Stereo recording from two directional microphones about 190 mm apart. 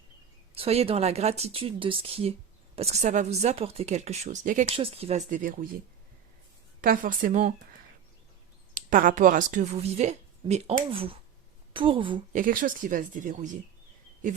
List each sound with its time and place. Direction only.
0.5 s speech: 30° right (ahead or behind)
6.8 s speech: 45° right (ahead or behind)
8.7 s a woman's voice: 45° right (ahead or behind); by 12.2 s 25° right (ahead or behind)
12.3 s speech: 45° right (ahead or behind)